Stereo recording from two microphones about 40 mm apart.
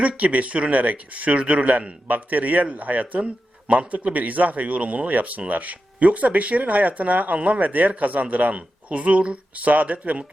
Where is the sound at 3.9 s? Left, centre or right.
Right.